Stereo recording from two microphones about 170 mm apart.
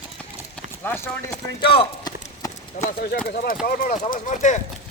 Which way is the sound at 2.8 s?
50° left (ahead or behind).